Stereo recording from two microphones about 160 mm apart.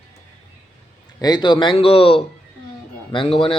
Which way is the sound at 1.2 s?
25° left (ahead or behind).